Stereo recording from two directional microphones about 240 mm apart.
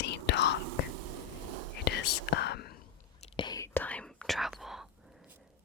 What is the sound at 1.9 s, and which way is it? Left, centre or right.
Whispering, left.